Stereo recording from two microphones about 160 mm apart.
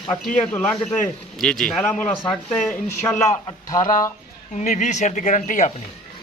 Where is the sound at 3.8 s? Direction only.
55° left (ahead or behind).